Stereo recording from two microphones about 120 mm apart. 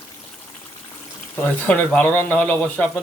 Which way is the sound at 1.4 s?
15° left (ahead or behind).